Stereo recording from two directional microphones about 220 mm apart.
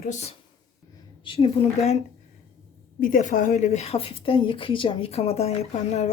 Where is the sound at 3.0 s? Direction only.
35° left (ahead or behind).